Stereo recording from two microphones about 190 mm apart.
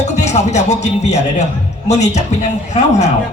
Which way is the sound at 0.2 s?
35° left (ahead or behind).